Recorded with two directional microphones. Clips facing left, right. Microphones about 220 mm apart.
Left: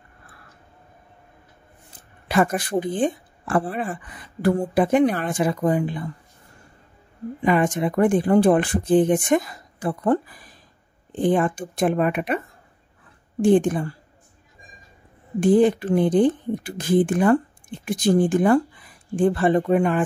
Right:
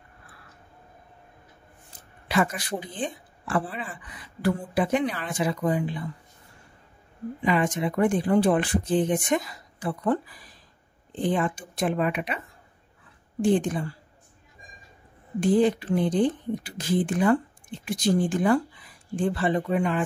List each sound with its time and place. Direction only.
2.2 s speech: 50° left (ahead or behind)
7.4 s speech: 50° left (ahead or behind)
13.4 s speech: 50° left (ahead or behind)
15.4 s speech: 50° left (ahead or behind)